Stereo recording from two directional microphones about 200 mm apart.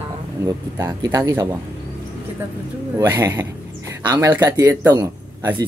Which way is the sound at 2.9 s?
15° right (ahead or behind).